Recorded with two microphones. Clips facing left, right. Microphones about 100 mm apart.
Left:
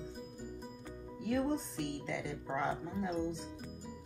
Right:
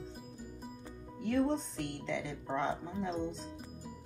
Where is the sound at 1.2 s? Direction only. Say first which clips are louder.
Right 3 dB; 5° left (ahead or behind).